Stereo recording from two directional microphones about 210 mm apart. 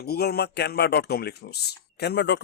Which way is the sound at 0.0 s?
50° left (ahead or behind).